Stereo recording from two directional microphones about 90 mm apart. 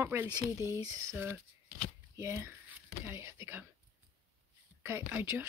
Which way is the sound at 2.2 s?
35° right (ahead or behind).